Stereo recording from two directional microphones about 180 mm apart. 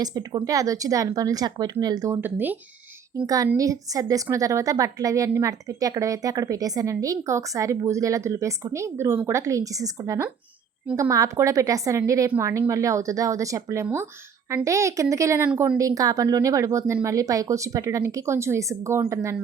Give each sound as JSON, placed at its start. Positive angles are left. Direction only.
{"t": 0.0, "sound": "a woman's voice", "side_deg": -20}